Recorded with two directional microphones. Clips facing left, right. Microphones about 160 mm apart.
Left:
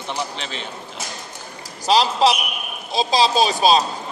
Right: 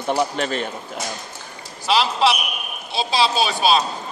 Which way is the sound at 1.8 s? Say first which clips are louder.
Left 2 dB; 40° left (ahead or behind).